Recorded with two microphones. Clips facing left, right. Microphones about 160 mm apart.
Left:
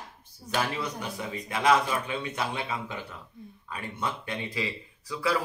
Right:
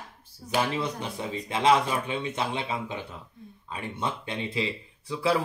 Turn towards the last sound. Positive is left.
turn(degrees=-25)  # may be behind; listen again after turning